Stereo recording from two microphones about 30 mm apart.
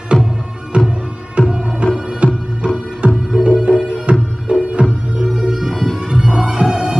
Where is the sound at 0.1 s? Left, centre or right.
Left.